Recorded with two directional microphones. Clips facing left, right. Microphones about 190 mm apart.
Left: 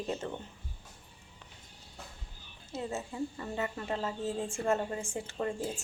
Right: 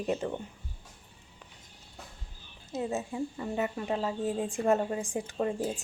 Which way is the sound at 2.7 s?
20° right (ahead or behind).